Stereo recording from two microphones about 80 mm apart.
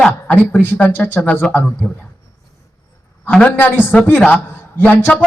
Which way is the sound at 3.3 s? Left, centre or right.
Centre.